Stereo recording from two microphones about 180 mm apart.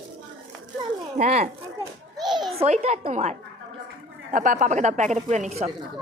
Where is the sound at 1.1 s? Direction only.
40° right (ahead or behind).